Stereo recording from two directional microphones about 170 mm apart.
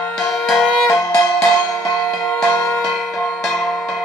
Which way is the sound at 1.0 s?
20° left (ahead or behind).